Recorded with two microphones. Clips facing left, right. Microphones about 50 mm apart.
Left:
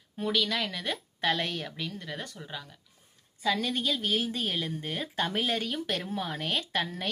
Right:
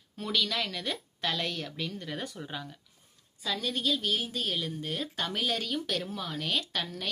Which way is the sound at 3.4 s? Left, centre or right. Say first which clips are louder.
Left 3 dB; left.